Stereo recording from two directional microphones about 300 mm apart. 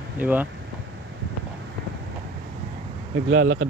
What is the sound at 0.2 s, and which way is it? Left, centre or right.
Speech, centre.